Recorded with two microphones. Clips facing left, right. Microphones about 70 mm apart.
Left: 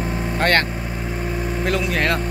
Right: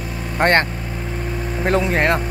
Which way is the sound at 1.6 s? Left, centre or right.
Right.